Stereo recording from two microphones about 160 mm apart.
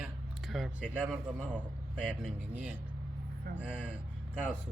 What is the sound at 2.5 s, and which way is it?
Speech, 10° right (ahead or behind).